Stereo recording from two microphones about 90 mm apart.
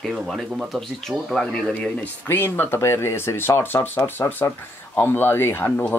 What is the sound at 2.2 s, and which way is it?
A man's voice, 25° left (ahead or behind).